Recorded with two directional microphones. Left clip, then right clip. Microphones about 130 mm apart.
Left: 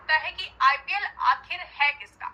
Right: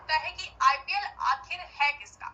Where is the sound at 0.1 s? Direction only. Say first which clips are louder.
Left 4 dB; 25° left (ahead or behind).